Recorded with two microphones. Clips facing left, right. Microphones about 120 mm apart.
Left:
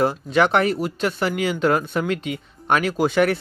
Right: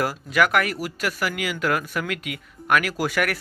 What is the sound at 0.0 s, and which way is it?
Speech, 25° left (ahead or behind).